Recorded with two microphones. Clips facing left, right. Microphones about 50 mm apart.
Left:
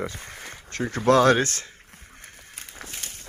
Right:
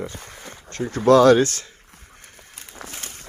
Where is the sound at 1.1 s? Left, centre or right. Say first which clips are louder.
Right 5 dB; left.